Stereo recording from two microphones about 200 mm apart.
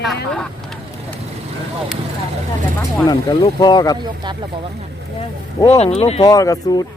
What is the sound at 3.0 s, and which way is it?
Speech, 20° left (ahead or behind).